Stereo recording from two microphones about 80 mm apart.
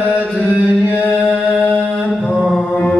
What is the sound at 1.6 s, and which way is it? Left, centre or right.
Mantra, left.